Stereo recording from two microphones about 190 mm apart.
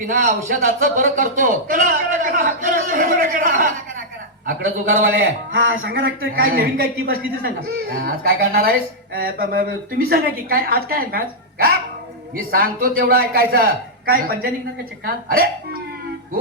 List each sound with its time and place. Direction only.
0.0 s a man's voice: 45° right (ahead or behind)
5.5 s speech: 90° right
5.9 s a man's voice: 50° right (ahead or behind)